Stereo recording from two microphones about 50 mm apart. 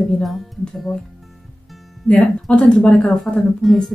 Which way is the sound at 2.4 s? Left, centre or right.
Centre.